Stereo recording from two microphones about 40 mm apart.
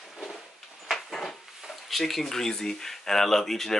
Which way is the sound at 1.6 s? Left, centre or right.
Centre.